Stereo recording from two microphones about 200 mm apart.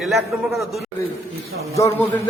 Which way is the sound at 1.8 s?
15° left (ahead or behind).